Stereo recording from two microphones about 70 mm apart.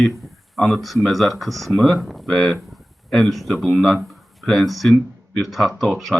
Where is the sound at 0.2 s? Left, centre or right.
Centre.